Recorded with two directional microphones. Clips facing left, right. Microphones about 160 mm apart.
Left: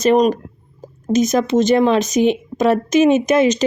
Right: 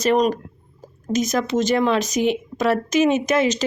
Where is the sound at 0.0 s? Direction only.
20° left (ahead or behind).